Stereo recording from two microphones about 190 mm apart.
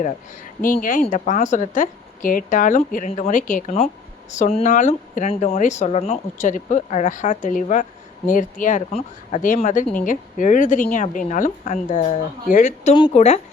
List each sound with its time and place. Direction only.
0.6 s a woman's voice: 45° left (ahead or behind)